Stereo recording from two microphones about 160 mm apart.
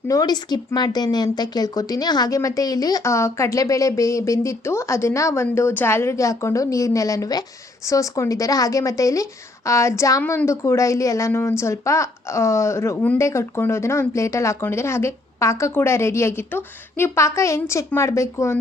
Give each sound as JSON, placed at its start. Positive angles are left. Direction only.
{"t": 0.1, "sound": "a woman's voice", "side_deg": 25}